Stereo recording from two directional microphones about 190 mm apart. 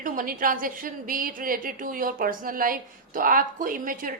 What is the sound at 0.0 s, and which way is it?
A woman's voice, 45° right (ahead or behind).